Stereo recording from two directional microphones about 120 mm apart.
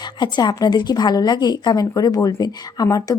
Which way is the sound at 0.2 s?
40° left (ahead or behind).